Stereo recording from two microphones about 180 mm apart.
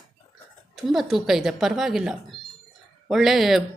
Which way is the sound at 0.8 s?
Centre (ahead or behind).